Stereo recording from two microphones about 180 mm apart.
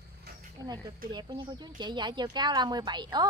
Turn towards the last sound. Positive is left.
turn(degrees=-25)  # may be behind; listen again after turning